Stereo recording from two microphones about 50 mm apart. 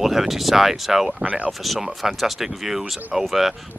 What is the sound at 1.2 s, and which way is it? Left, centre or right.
Speech, right.